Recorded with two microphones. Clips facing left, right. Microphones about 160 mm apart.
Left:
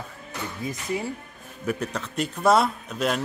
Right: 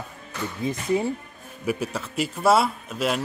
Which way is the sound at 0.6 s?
25° right (ahead or behind).